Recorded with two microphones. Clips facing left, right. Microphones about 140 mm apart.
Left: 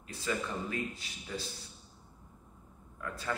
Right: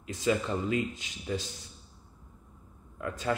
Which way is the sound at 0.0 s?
20° right (ahead or behind).